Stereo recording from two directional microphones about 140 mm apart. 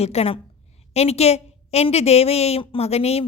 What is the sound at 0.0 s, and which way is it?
A woman's voice, 50° left (ahead or behind).